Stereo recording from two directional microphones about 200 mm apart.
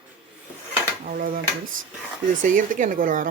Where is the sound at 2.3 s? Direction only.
40° right (ahead or behind).